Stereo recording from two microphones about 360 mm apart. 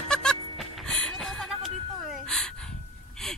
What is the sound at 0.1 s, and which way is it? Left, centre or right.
Music, centre.